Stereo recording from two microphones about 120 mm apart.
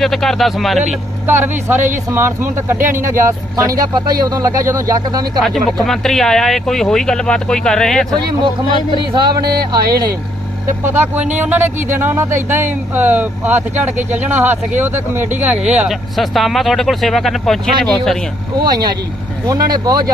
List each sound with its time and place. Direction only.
0.0 s speech: centre (ahead or behind)
1.2 s speech: 15° right (ahead or behind)
5.4 s speech: centre (ahead or behind)
8.1 s speech: 35° right (ahead or behind)
10.8 s speech: 20° right (ahead or behind); by 18.1 s 5° left (ahead or behind)
18.6 s speech: 35° right (ahead or behind)